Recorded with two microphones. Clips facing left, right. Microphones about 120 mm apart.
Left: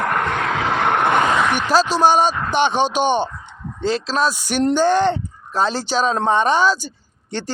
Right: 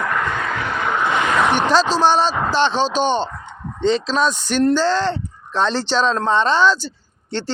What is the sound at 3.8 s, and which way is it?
Speech, 5° left (ahead or behind).